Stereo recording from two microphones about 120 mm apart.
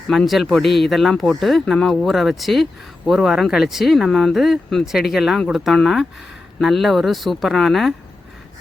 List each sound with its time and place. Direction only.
0.1 s speech: centre (ahead or behind)